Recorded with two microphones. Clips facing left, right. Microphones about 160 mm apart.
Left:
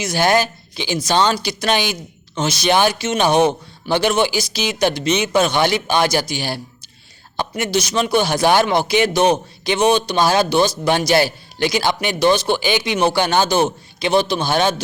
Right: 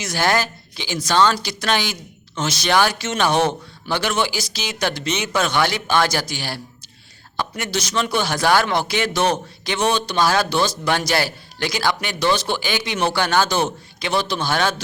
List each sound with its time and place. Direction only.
0.0 s a man's voice: 15° left (ahead or behind)